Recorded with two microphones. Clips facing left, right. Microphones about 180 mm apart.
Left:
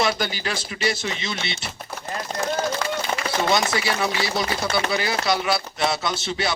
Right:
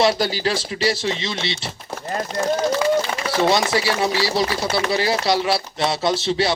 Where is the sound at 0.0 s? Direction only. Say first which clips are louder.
Right 5 dB; 30° right (ahead or behind).